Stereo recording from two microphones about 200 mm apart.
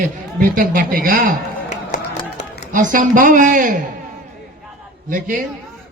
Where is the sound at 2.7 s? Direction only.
40° right (ahead or behind).